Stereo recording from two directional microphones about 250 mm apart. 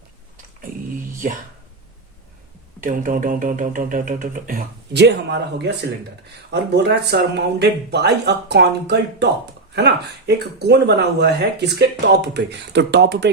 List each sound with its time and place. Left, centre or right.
1.2 s speech: right
2.8 s speech: right